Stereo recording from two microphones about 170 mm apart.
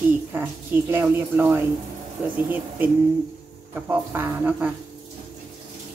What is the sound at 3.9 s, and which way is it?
Speech, 10° right (ahead or behind).